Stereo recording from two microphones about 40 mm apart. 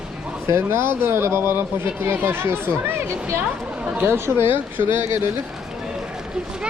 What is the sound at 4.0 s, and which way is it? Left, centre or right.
Speech, right.